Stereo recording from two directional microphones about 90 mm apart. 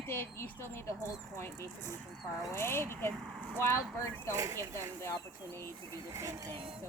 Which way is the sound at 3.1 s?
Centre (ahead or behind).